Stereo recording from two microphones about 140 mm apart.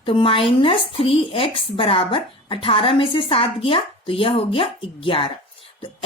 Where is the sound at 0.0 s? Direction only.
40° left (ahead or behind).